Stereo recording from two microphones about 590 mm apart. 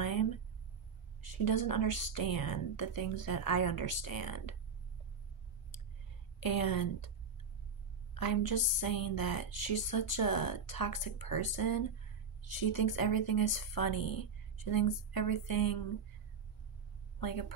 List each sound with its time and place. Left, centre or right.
0.0 s a sound: left
1.3 s a woman's voice: left
6.4 s a woman's voice: left
8.2 s a woman's voice: left
17.2 s a woman's voice: left